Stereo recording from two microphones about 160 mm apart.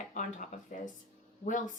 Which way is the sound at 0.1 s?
50° left (ahead or behind).